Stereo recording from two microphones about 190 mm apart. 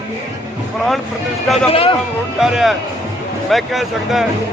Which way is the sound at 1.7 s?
30° left (ahead or behind).